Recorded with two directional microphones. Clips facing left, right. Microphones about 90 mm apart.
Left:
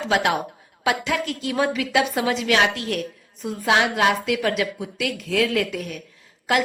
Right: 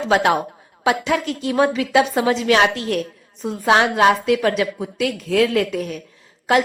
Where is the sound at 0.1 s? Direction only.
35° right (ahead or behind).